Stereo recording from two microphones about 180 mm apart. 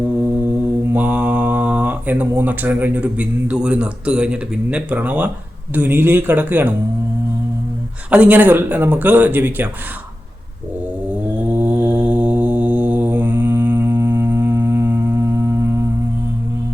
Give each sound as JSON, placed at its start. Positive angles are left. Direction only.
{"t": 0.9, "sound": "speech", "side_deg": -10}
{"t": 8.1, "sound": "speech", "side_deg": -10}
{"t": 11.4, "sound": "mantra", "side_deg": -10}